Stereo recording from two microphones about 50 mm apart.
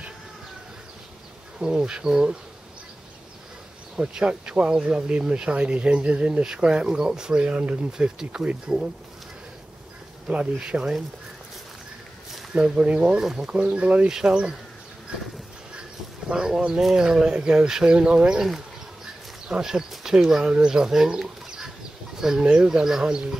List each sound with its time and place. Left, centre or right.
1.6 s speech: centre
3.9 s speech: centre
8.2 s speech: centre
10.2 s speech: centre
12.5 s speech: right
13.1 s speech: centre
13.6 s speech: right
16.3 s speech: centre